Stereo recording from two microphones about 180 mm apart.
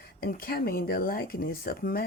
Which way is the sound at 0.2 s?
55° left (ahead or behind).